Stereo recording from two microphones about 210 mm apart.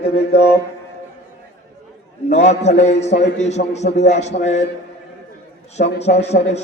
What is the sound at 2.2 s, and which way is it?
A man's voice, 30° left (ahead or behind).